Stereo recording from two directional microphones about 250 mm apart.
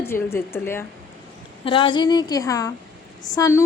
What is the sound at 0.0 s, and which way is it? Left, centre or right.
Speech, centre.